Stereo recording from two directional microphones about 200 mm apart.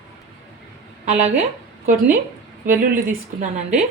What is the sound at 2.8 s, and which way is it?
Speech, 45° right (ahead or behind).